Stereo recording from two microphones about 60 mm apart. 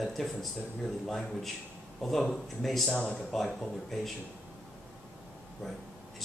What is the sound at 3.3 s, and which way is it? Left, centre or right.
Speech, centre.